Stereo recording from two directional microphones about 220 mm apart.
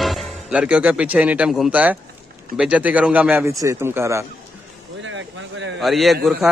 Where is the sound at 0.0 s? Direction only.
Centre (ahead or behind).